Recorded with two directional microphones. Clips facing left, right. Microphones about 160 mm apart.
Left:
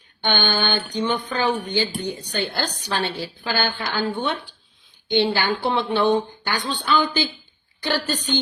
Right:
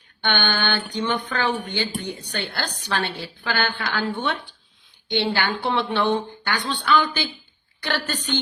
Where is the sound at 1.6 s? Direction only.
35° left (ahead or behind).